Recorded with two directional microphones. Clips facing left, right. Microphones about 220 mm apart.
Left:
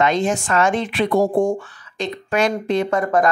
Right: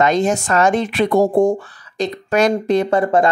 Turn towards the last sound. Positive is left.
turn(degrees=-30)  # may be behind; listen again after turning